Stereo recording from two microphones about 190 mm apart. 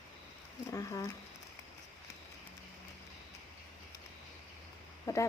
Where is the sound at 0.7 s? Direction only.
15° left (ahead or behind).